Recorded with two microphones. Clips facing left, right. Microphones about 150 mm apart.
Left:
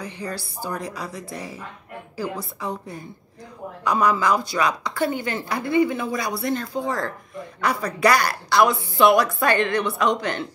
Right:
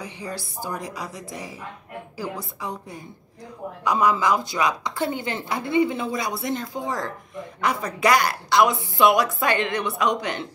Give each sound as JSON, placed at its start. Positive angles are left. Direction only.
{"t": 0.0, "sound": "a woman's voice", "side_deg": -20}